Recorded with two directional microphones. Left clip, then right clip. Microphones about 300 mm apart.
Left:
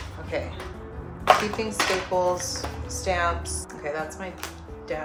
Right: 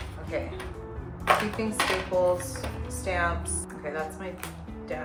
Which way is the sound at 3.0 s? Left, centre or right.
Left.